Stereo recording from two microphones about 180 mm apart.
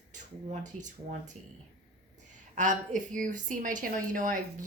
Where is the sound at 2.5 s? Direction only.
45° right (ahead or behind).